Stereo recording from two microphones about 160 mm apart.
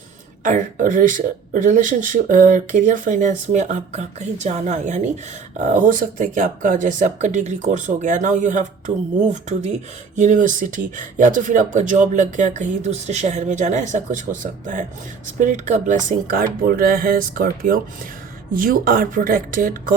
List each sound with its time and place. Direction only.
0.4 s speech: 55° right (ahead or behind)